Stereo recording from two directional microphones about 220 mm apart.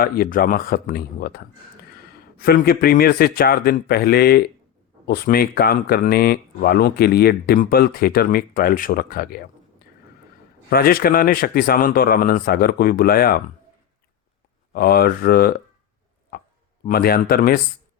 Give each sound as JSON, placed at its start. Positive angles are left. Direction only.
{"t": 0.0, "sound": "speech", "side_deg": 40}
{"t": 14.7, "sound": "speech", "side_deg": 45}
{"t": 16.3, "sound": "a sound", "side_deg": 45}
{"t": 16.8, "sound": "speech", "side_deg": 45}